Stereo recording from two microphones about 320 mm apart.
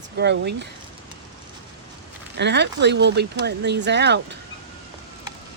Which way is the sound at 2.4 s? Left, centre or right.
Right.